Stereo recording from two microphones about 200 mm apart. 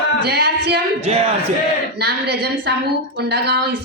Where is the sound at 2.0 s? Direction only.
55° right (ahead or behind).